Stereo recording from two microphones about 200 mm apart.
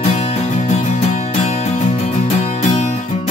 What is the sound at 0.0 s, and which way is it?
Music, 35° left (ahead or behind).